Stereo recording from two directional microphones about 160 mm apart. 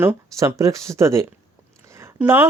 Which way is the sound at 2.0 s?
10° right (ahead or behind).